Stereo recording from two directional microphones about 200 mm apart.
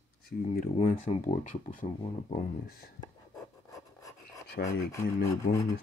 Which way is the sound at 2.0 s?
30° left (ahead or behind).